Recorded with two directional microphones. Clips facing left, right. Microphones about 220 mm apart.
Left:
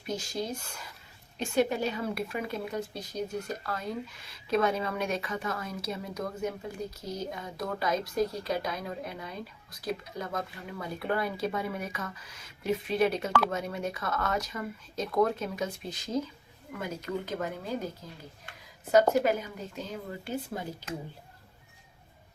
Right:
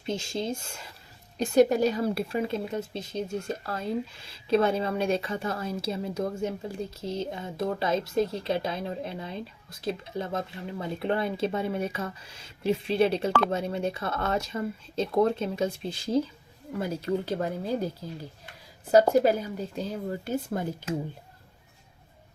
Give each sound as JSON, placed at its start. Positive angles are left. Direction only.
{"t": 0.0, "sound": "a woman's voice", "side_deg": -25}
{"t": 1.4, "sound": "a woman's voice", "side_deg": -40}
{"t": 19.2, "sound": "speech", "side_deg": -30}